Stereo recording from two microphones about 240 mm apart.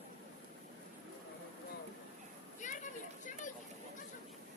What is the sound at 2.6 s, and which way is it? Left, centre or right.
Children playing, left.